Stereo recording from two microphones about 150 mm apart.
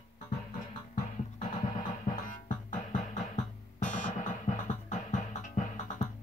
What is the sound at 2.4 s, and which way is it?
Music, 55° left (ahead or behind).